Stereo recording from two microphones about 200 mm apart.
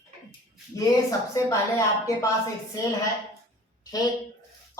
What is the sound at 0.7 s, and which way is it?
Speech, 15° left (ahead or behind).